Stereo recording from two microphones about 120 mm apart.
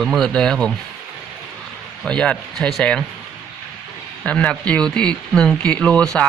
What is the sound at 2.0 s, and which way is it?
Speech, 5° left (ahead or behind).